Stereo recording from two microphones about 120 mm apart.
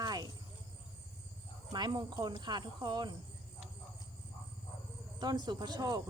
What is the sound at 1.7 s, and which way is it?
Speech, 35° right (ahead or behind).